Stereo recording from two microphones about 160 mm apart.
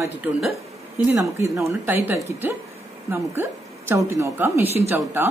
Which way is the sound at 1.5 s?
15° right (ahead or behind).